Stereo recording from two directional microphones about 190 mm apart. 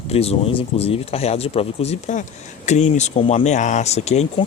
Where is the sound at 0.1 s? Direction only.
30° left (ahead or behind).